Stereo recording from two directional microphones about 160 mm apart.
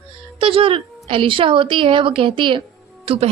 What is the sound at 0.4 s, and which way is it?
A woman's voice, 35° right (ahead or behind).